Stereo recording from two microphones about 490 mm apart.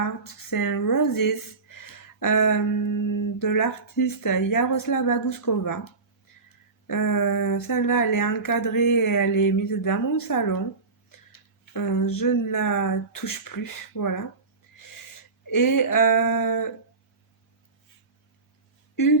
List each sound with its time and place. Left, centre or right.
0.0 s speech: left
11.7 s speech: left
15.4 s speech: left